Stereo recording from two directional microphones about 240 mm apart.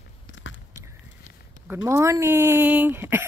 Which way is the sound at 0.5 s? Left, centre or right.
Left.